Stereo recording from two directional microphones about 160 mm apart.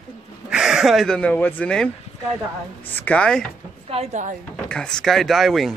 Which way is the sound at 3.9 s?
50° right (ahead or behind).